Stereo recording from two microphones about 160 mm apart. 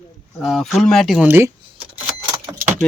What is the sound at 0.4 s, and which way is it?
Speech, centre (ahead or behind).